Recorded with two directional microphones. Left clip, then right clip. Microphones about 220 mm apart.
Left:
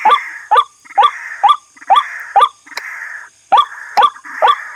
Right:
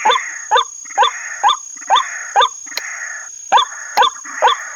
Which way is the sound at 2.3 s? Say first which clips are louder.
Left 3 dB; 20° left (ahead or behind).